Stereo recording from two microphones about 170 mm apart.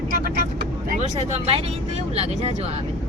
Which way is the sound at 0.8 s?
45° right (ahead or behind).